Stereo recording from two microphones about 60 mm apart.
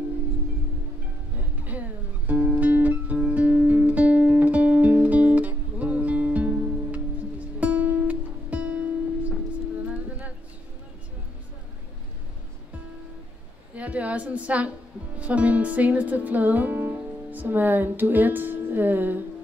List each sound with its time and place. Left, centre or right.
1.6 s music: right
13.7 s a sound: right
15.1 s music: right